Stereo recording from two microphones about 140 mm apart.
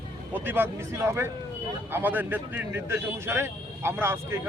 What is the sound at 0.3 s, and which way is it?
Speech, 15° right (ahead or behind).